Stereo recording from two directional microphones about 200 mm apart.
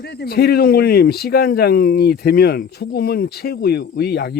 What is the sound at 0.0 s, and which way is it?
Speech, 55° left (ahead or behind).